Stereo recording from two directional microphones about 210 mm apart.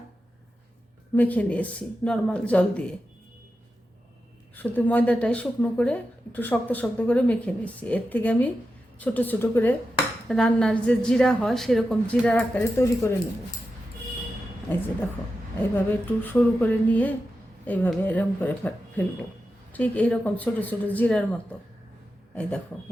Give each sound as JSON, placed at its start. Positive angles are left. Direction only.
{"t": 1.1, "sound": "a woman's voice", "side_deg": 10}
{"t": 4.5, "sound": "a woman's voice", "side_deg": 10}
{"t": 14.7, "sound": "speech", "side_deg": 10}
{"t": 15.9, "sound": "speech", "side_deg": 10}
{"t": 22.4, "sound": "a woman's voice", "side_deg": 5}